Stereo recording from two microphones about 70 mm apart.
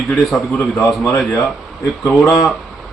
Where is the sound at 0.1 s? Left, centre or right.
Centre.